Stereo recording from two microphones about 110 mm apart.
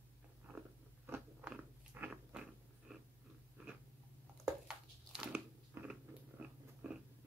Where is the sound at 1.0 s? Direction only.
20° right (ahead or behind).